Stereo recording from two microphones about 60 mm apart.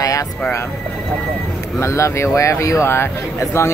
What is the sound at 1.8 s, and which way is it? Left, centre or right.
Speech, left.